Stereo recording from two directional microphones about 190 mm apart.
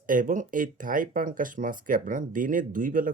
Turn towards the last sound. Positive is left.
turn(degrees=-45)  # may be behind; listen again after turning